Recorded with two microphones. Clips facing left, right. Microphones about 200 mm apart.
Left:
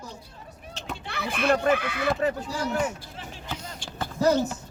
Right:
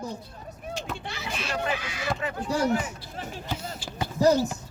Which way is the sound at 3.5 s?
10° right (ahead or behind).